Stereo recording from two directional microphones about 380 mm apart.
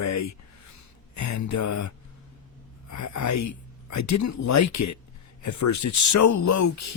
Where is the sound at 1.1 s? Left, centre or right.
Left.